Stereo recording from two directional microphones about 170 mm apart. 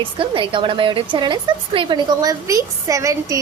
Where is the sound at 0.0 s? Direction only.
30° right (ahead or behind).